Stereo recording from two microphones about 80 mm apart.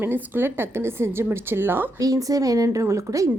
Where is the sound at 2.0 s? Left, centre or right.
Right.